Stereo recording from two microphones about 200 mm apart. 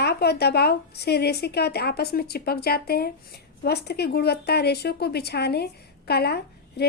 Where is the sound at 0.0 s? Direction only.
55° left (ahead or behind).